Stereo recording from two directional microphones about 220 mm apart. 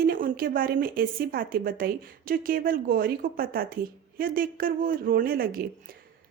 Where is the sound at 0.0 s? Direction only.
40° right (ahead or behind).